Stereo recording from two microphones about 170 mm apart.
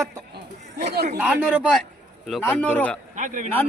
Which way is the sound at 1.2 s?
10° right (ahead or behind).